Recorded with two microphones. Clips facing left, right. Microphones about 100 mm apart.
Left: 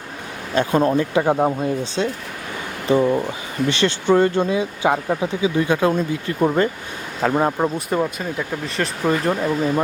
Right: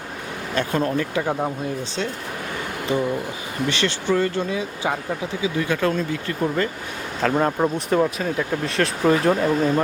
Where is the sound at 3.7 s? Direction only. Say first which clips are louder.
Left 5 dB; 25° left (ahead or behind).